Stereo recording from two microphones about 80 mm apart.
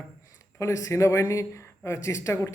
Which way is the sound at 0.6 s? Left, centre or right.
Left.